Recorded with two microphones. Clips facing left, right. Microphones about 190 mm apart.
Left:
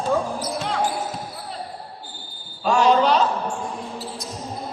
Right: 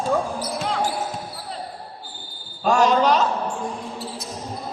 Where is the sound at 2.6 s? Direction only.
45° right (ahead or behind).